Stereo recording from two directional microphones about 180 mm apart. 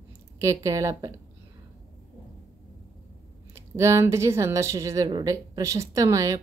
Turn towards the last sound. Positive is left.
turn(degrees=-20)  # may be behind; listen again after turning